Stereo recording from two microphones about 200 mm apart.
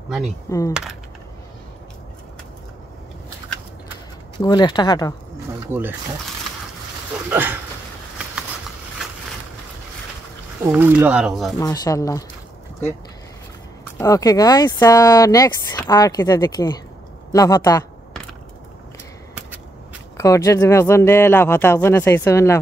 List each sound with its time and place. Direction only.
0.5 s speech: 15° left (ahead or behind)
4.4 s speech: 20° left (ahead or behind)
5.7 s speech: 10° right (ahead or behind)
7.2 s speech: 10° right (ahead or behind)
10.6 s speech: 10° right (ahead or behind)
11.6 s speech: 20° left (ahead or behind)
13.9 s speech: 15° left (ahead or behind)
20.2 s speech: 15° left (ahead or behind)